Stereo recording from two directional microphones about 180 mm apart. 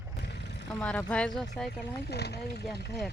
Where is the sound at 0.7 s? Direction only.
5° left (ahead or behind).